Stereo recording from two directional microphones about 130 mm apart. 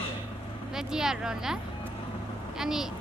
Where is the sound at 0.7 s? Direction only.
5° right (ahead or behind).